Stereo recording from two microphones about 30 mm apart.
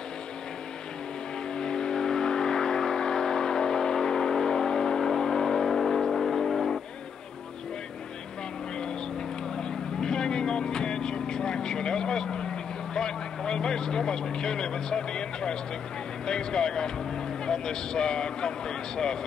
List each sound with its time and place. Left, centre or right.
1.5 s vehicle: left
5.7 s vehicle: centre
9.6 s vehicle: left
12.9 s a man's voice: left